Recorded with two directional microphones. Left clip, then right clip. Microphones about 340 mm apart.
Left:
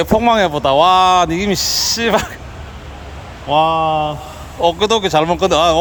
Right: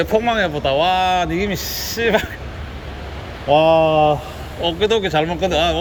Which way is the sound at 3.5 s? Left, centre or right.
Centre.